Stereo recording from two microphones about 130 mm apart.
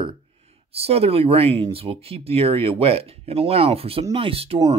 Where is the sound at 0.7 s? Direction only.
50° right (ahead or behind).